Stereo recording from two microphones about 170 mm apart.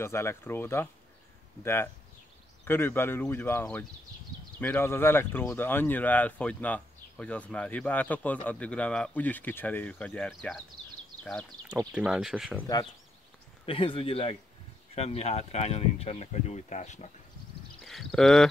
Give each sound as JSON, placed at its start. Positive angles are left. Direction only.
{"t": 0.0, "sound": "speech", "side_deg": 15}
{"t": 11.9, "sound": "speech", "side_deg": -5}
{"t": 13.7, "sound": "speech", "side_deg": 30}
{"t": 17.8, "sound": "speech", "side_deg": 0}